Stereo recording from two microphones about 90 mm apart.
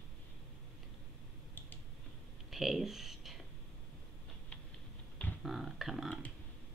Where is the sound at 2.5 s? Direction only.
Centre (ahead or behind).